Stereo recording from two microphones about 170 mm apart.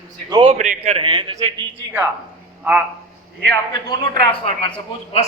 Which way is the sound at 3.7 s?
25° left (ahead or behind).